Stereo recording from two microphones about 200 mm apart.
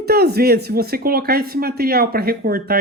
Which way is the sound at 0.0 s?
55° right (ahead or behind).